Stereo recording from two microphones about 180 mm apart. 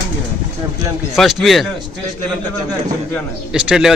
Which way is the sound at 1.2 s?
Centre (ahead or behind).